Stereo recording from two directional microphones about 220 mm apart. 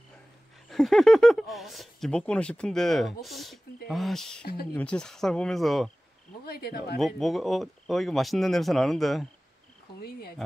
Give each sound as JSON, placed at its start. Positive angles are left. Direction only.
{"t": 0.7, "sound": "speech", "side_deg": 0}
{"t": 6.4, "sound": "speech", "side_deg": 45}
{"t": 7.0, "sound": "speech", "side_deg": 0}